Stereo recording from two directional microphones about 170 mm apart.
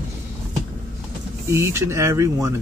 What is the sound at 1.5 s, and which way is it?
Speech, 15° right (ahead or behind).